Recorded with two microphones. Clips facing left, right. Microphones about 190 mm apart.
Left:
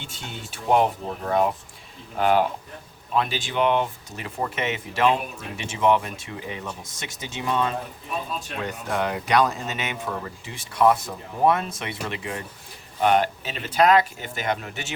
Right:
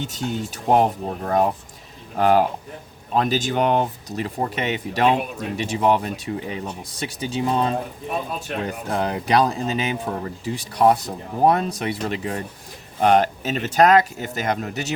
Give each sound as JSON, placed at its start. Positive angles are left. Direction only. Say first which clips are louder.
{"t": 0.0, "sound": "speech", "louder": "right 11 dB", "side_deg": -40}
{"t": 8.9, "sound": "speech", "louder": "right 2 dB", "side_deg": -35}